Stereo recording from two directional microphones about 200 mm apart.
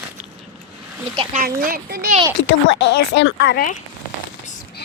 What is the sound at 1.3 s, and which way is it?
Speech, 45° right (ahead or behind).